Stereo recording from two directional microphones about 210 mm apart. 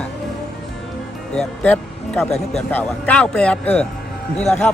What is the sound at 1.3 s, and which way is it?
Speech, 5° left (ahead or behind).